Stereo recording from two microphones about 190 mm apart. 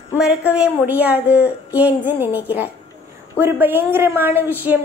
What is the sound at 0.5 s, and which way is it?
A woman's voice, 10° right (ahead or behind).